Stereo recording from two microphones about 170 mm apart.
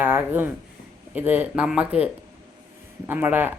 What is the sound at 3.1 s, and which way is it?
Speech, 10° right (ahead or behind).